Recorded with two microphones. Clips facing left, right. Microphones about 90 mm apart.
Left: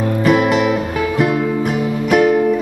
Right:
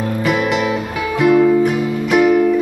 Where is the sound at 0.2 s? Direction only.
35° left (ahead or behind).